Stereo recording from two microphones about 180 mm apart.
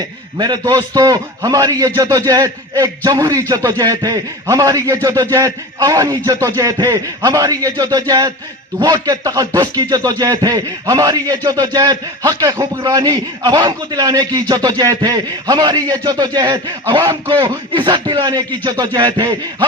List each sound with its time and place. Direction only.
0.3 s speech: 20° right (ahead or behind)